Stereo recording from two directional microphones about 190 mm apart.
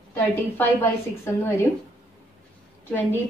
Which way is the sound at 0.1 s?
10° left (ahead or behind).